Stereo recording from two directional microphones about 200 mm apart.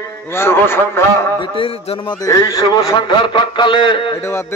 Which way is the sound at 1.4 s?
25° left (ahead or behind).